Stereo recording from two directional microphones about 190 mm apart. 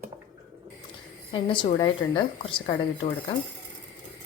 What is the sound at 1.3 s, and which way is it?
A woman's voice, 25° left (ahead or behind).